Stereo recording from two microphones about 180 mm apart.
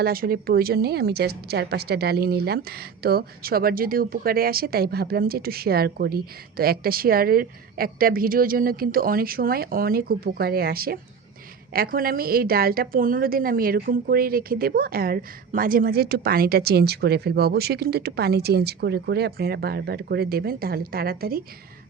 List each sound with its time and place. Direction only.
0.0 s a woman's voice: 55° right (ahead or behind)